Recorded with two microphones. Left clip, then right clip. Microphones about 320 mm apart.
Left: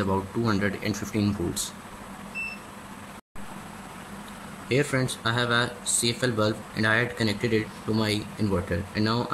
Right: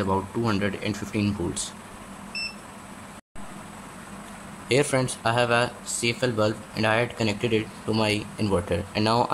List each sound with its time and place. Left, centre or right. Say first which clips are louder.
0.0 s speech: right 1 dB; centre
4.6 s speech: right 3 dB; centre